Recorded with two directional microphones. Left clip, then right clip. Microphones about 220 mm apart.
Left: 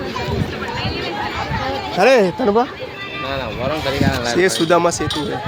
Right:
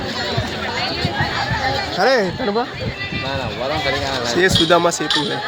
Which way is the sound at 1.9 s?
45° left (ahead or behind).